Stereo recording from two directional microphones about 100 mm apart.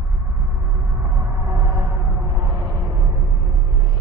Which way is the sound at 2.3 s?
45° right (ahead or behind).